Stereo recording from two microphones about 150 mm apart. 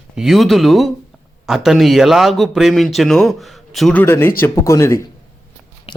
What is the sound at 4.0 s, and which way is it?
Speech, 15° left (ahead or behind).